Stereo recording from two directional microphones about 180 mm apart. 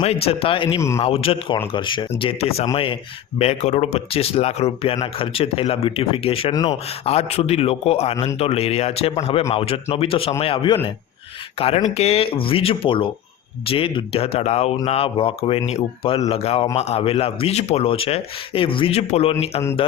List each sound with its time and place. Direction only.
0.3 s a man's voice: 30° left (ahead or behind)